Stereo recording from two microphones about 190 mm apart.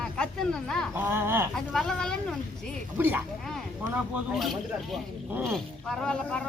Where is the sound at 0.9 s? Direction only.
10° right (ahead or behind).